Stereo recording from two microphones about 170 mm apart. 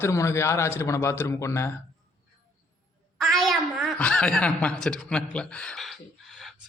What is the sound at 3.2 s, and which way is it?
Speech, centre (ahead or behind).